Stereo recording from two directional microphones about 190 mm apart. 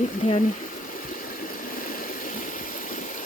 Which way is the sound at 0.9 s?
45° left (ahead or behind).